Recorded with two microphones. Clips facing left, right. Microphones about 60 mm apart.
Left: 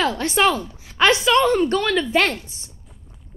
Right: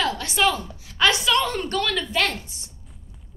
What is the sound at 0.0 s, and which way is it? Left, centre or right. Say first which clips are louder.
A woman's voice: left 4 dB; left.